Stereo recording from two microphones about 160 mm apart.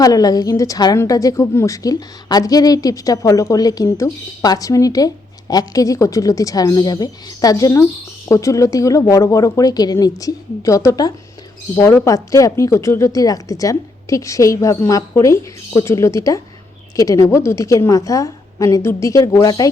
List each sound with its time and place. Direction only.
0.0 s a woman's voice: 25° left (ahead or behind)